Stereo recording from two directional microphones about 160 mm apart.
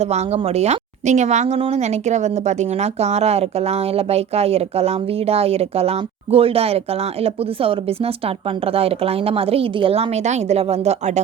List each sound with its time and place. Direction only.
0.0 s a woman's voice: 40° right (ahead or behind)